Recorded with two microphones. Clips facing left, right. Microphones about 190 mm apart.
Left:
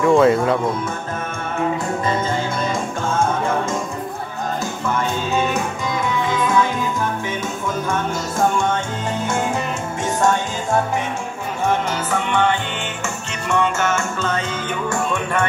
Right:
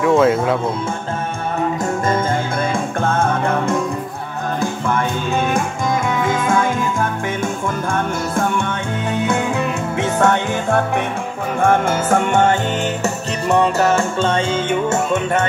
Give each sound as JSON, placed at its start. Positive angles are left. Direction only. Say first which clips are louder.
{"t": 0.0, "sound": "speech", "louder": "even", "side_deg": 0}
{"t": 3.0, "sound": "music", "louder": "right 2 dB", "side_deg": -55}
{"t": 6.2, "sound": "music", "louder": "even", "side_deg": -50}
{"t": 7.8, "sound": "music", "louder": "right 2 dB", "side_deg": -55}